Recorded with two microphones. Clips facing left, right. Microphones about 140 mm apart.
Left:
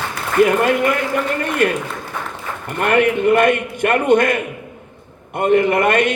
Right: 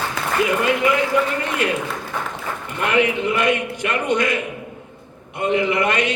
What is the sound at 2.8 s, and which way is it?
A man's voice, 55° left (ahead or behind).